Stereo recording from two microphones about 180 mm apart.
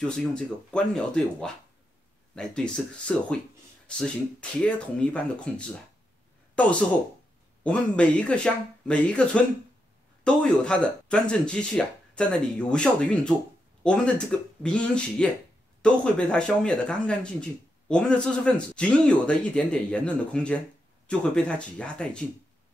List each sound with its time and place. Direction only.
0.1 s speech: 5° left (ahead or behind)